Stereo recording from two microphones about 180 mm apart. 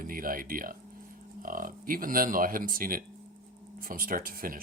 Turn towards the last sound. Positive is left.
turn(degrees=-55)  # may be behind; listen again after turning